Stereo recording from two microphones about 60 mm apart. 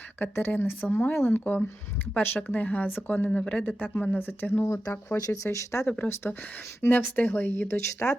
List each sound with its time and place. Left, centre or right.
0.2 s speech: left
3.2 s speech: centre; by 4.6 s left
4.6 s speech: left
6.8 s speech: left